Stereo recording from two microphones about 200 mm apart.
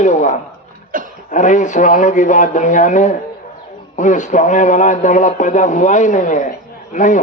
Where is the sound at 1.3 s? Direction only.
40° left (ahead or behind).